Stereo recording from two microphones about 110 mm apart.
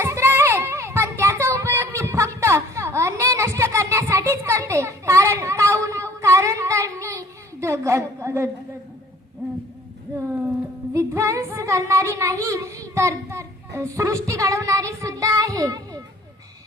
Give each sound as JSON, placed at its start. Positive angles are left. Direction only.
{"t": 0.0, "sound": "children playing", "side_deg": -25}
{"t": 10.9, "sound": "child singing", "side_deg": -25}